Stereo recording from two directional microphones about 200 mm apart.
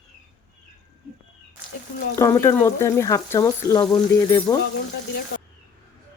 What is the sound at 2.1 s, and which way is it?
Speech, 15° left (ahead or behind).